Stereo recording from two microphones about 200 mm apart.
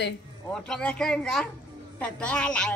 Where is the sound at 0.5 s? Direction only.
5° left (ahead or behind).